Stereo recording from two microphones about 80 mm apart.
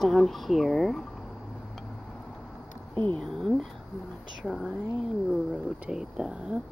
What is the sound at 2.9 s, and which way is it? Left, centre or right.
Speech, right.